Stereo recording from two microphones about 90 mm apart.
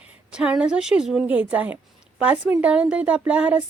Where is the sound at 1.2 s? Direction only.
20° right (ahead or behind).